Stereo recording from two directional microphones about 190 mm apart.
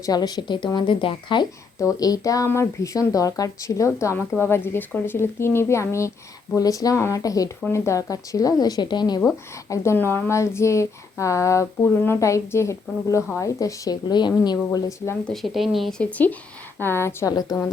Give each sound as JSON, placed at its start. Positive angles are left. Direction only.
{"t": 0.0, "sound": "a woman's voice", "side_deg": 20}
{"t": 15.3, "sound": "speech", "side_deg": 0}
{"t": 16.8, "sound": "speech", "side_deg": 10}